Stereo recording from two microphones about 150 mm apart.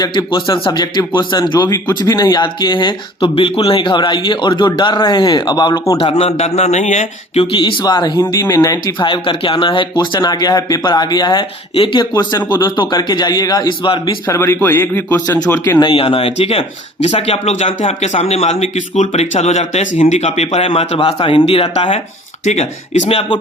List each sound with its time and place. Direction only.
0.0 s speech: 30° left (ahead or behind)
6.0 s speech: 40° left (ahead or behind)
14.3 s a man's voice: 20° left (ahead or behind)
15.8 s speech: 35° left (ahead or behind)